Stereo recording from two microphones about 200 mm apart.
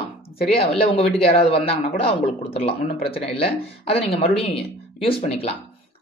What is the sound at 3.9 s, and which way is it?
Speech, 30° left (ahead or behind).